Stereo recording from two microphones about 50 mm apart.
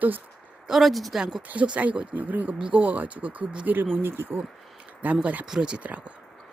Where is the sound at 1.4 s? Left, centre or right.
Right.